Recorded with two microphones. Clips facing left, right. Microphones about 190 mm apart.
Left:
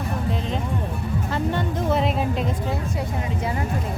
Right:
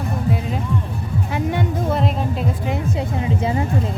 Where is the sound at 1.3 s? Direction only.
15° right (ahead or behind).